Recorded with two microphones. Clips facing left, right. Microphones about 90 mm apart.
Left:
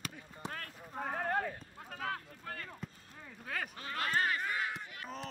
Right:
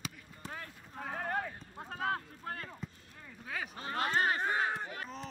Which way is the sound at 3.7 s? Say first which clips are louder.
Right 3 dB; 30° right (ahead or behind).